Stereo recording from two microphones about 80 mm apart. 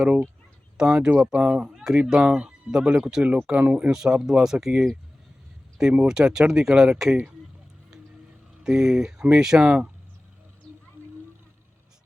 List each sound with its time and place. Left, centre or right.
0.0 s speech: centre
3.6 s speech: centre
6.1 s speech: centre
8.6 s speech: centre